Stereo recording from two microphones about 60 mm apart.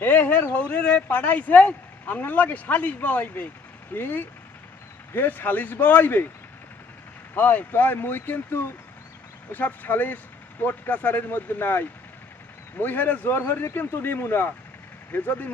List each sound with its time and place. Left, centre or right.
0.0 s speech: left
7.3 s speech: left
9.5 s speech: left